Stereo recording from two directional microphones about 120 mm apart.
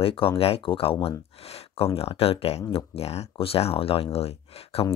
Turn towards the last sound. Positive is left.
turn(degrees=55)  # may be behind; listen again after turning